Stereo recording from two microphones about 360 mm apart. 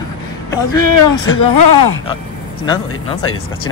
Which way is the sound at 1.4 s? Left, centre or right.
Left.